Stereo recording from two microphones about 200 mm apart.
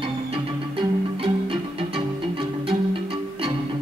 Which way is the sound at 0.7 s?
30° right (ahead or behind).